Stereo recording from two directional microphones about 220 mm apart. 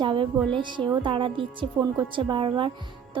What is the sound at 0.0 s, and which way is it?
A woman's voice, 20° right (ahead or behind).